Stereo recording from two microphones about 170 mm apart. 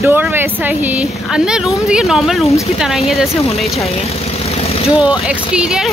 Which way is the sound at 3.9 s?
35° left (ahead or behind).